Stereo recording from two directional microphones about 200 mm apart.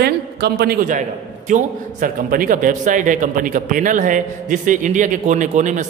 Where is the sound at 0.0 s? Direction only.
55° right (ahead or behind).